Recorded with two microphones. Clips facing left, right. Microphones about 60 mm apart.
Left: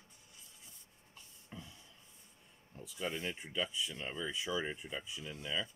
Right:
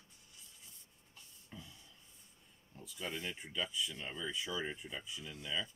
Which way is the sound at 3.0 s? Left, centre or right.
Centre.